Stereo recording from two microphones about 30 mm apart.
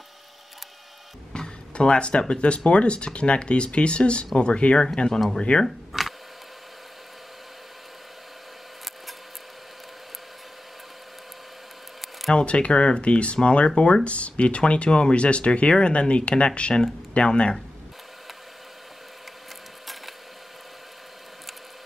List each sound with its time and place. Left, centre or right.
1.7 s speech: left
4.9 s speech: left
5.5 s speech: left
5.9 s a sound: centre
12.4 s speech: left